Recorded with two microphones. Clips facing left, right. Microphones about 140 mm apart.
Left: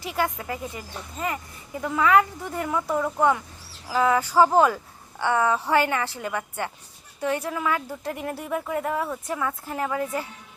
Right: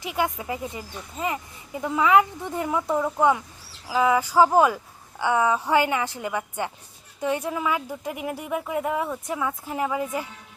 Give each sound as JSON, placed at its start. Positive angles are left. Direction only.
{"t": 0.0, "sound": "speech", "side_deg": -15}